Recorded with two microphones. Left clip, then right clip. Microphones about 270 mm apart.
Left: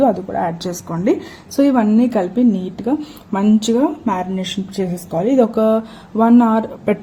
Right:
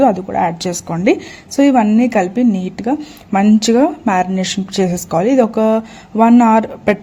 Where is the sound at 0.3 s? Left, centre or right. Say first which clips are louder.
Right 4 dB; right.